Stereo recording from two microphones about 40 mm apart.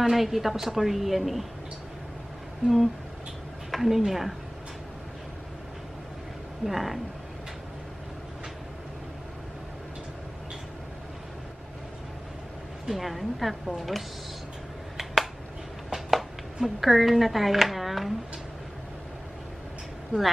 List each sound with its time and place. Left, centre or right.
0.0 s a woman's voice: centre
2.6 s a sound: right
3.7 s a woman's voice: centre
6.6 s a woman's voice: centre
12.8 s a woman's voice: centre
15.9 s speech: centre